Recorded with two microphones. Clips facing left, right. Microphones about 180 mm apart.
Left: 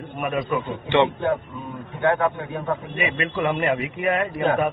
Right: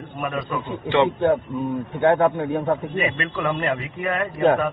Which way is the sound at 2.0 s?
60° right (ahead or behind).